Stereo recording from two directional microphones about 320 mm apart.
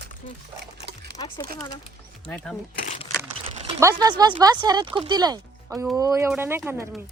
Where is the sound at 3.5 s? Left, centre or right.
Right.